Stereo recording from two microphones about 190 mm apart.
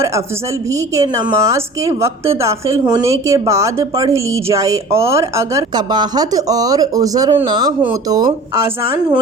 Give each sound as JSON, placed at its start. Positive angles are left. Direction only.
{"t": 0.7, "sound": "a woman's voice", "side_deg": -15}